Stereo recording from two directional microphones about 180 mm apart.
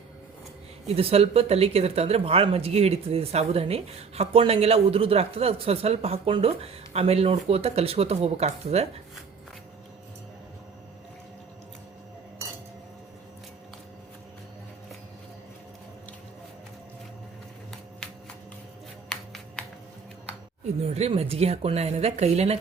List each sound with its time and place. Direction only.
0.9 s speech: 35° right (ahead or behind)
20.9 s speech: 35° right (ahead or behind)